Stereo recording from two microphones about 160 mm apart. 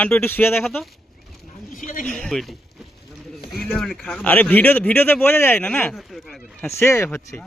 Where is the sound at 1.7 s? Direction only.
55° left (ahead or behind).